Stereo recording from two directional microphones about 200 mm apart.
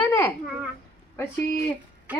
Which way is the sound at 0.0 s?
15° left (ahead or behind).